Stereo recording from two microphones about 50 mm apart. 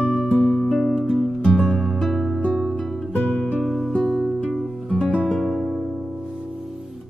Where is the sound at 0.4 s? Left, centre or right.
Centre.